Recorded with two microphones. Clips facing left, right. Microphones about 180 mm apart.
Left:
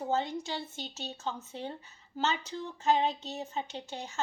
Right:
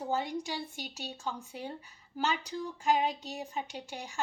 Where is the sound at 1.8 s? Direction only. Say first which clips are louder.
Left 1 dB; 25° left (ahead or behind).